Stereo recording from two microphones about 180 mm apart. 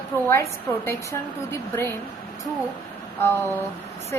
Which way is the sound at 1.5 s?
15° left (ahead or behind).